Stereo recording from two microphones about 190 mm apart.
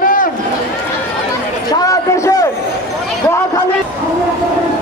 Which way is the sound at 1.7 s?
15° left (ahead or behind).